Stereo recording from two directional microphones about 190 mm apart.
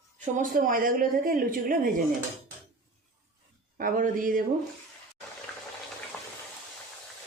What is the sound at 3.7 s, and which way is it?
Speech, 45° right (ahead or behind).